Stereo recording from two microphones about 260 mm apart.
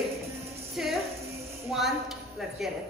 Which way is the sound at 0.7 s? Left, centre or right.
Centre.